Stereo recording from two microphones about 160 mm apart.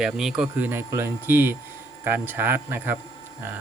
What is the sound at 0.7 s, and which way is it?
Speech, 15° right (ahead or behind).